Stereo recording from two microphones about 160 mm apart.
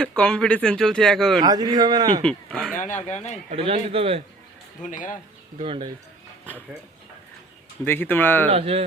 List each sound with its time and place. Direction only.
0.2 s speech: 5° left (ahead or behind)
1.4 s speech: 25° right (ahead or behind)
2.2 s speech: 5° left (ahead or behind)
3.5 s a man's voice: 35° right (ahead or behind)
4.8 s speech: 55° left (ahead or behind)
5.5 s a man's voice: 35° right (ahead or behind)
7.9 s speech: 10° left (ahead or behind)
8.4 s a man's voice: 40° right (ahead or behind)